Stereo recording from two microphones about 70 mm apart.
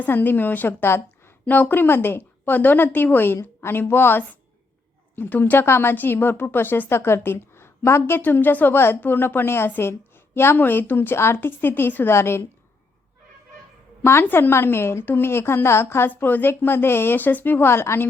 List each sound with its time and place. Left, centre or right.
0.0 s a woman's voice: left
14.0 s a woman's voice: left